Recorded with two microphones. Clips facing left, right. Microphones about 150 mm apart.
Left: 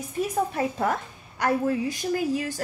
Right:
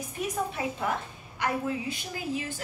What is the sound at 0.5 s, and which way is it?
A woman's voice, 45° left (ahead or behind).